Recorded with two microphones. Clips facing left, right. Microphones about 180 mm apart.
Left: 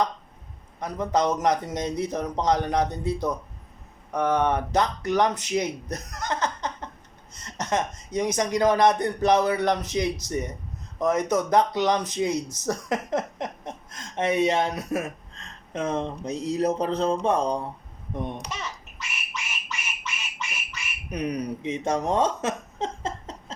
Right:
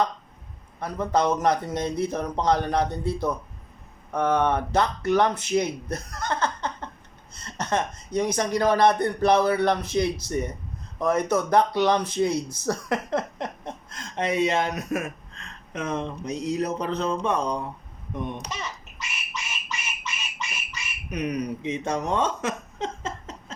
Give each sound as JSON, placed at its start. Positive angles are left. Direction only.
{"t": 0.8, "sound": "a child's voice", "side_deg": 15}
{"t": 18.9, "sound": "a sound", "side_deg": -15}
{"t": 21.1, "sound": "speech", "side_deg": 30}